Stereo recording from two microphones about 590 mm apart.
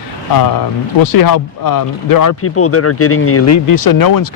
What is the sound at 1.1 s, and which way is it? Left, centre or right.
Speech, left.